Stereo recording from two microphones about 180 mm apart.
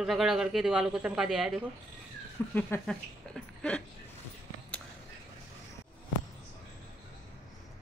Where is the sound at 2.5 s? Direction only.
10° left (ahead or behind).